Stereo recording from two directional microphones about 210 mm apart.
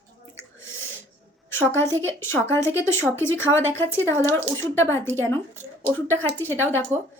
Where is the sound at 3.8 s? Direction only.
10° left (ahead or behind).